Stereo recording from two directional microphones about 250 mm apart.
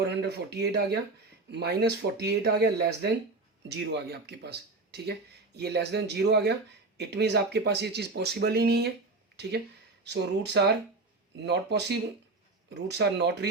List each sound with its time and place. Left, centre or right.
0.0 s speech: right
10.0 s speech: right